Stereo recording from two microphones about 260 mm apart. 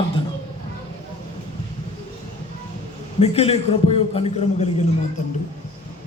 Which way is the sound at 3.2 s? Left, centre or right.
Left.